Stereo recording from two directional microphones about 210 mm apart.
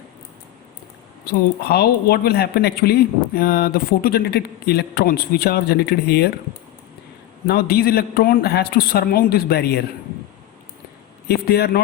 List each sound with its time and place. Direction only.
1.2 s speech: 45° left (ahead or behind)
7.4 s speech: 50° left (ahead or behind)
11.3 s speech: 50° left (ahead or behind)